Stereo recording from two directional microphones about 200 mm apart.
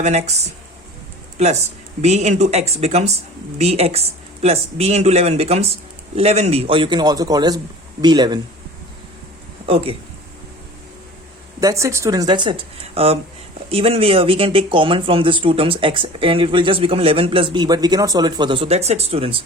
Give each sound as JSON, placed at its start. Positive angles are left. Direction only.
{"t": 0.0, "sound": "speech", "side_deg": -35}
{"t": 2.0, "sound": "speech", "side_deg": -35}
{"t": 9.6, "sound": "speech", "side_deg": -30}
{"t": 11.6, "sound": "speech", "side_deg": -15}